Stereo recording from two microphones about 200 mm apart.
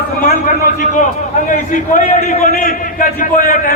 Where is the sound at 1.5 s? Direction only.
40° left (ahead or behind).